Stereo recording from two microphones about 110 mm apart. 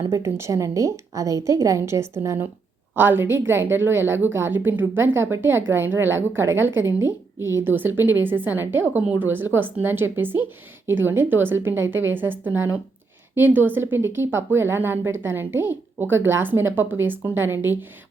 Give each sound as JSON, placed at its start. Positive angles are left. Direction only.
{"t": 0.1, "sound": "a woman's voice", "side_deg": -25}